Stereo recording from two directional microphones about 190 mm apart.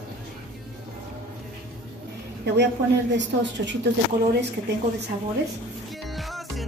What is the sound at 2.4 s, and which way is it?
A woman's voice, 65° right (ahead or behind).